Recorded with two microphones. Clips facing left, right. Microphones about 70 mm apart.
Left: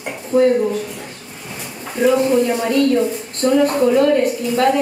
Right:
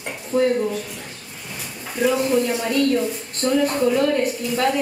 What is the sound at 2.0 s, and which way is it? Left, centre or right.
A woman's voice, centre.